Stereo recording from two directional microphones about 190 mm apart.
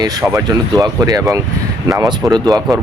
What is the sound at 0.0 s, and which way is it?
Speech, 15° right (ahead or behind).